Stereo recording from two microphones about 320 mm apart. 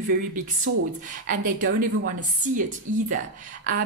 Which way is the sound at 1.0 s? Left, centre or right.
Right.